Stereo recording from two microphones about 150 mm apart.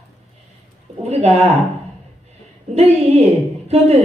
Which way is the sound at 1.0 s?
45° right (ahead or behind).